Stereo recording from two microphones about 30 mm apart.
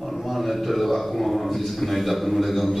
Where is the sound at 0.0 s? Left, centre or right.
Centre.